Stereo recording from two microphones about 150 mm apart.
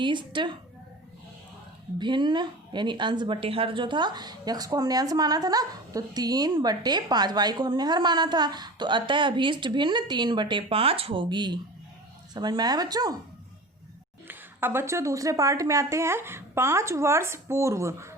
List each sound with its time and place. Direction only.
0.0 s a woman's voice: 30° right (ahead or behind)
2.0 s a woman's voice: 30° right (ahead or behind)
14.3 s a woman's voice: 15° right (ahead or behind)